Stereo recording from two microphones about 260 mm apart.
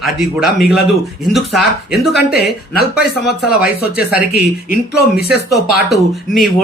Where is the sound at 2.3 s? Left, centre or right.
Left.